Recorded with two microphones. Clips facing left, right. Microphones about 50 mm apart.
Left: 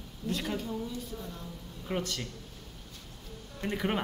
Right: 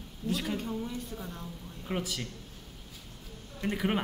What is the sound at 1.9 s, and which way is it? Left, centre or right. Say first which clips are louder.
Speech: even; centre.